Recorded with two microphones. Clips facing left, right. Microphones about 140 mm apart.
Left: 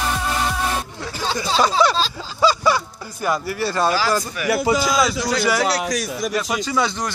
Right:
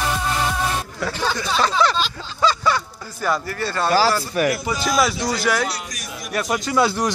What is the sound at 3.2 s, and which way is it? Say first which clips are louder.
Speech: left 1 dB; 10° left (ahead or behind).